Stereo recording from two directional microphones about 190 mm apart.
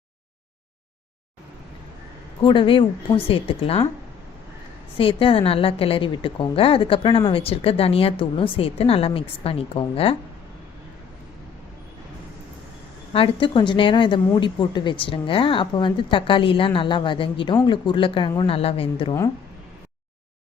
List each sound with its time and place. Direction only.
2.4 s a woman's voice: 25° left (ahead or behind)
4.9 s a woman's voice: 30° left (ahead or behind)
13.1 s a woman's voice: 25° left (ahead or behind)